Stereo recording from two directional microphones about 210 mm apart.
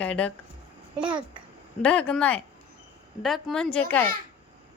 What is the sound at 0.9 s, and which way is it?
Speech, 5° right (ahead or behind).